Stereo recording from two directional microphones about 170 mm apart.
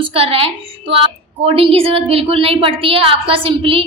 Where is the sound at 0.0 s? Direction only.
35° right (ahead or behind).